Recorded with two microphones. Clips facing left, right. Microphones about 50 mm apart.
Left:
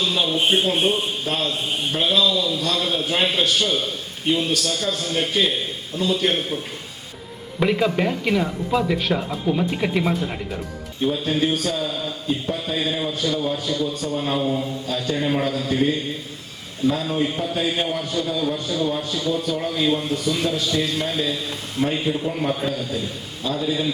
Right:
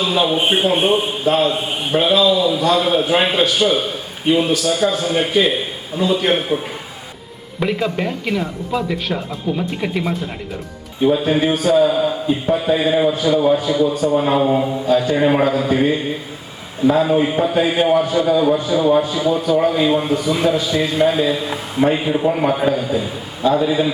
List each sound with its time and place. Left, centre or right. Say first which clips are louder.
0.0 s a man's voice: right 4 dB; centre
7.6 s speech: even; centre
11.1 s a man's voice: right 5 dB; right
18.5 s a man's voice: right 7 dB; centre
18.9 s a man's voice: right 10 dB; right
19.2 s a man's voice: right 8 dB; centre
22.3 s a man's voice: right 7 dB; right
22.5 s a man's voice: right 8 dB; right